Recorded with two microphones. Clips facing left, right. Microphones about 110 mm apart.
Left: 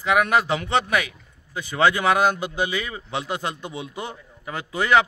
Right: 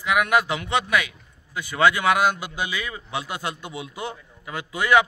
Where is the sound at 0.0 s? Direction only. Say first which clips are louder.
Left 1 dB; 30° left (ahead or behind).